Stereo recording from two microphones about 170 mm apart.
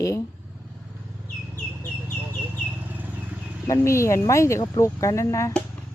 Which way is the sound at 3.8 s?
15° left (ahead or behind).